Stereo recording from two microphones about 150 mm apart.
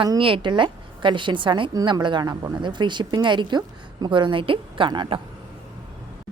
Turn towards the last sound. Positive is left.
turn(degrees=-35)  # may be behind; listen again after turning